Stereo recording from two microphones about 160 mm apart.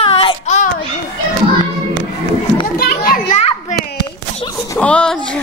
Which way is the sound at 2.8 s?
65° left (ahead or behind).